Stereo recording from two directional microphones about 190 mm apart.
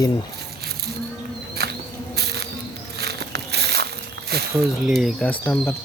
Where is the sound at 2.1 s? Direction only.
60° right (ahead or behind).